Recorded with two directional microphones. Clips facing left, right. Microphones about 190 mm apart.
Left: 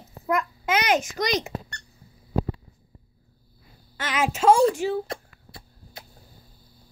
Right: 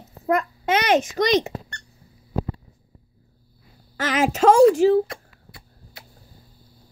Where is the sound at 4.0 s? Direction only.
45° right (ahead or behind).